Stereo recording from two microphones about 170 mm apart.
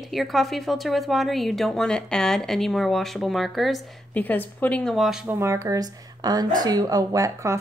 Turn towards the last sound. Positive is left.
turn(degrees=-15)  # may be behind; listen again after turning